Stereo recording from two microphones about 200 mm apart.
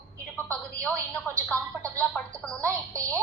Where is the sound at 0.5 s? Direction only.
5° left (ahead or behind).